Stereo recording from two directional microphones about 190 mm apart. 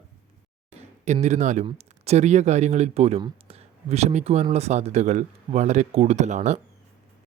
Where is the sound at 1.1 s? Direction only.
40° right (ahead or behind).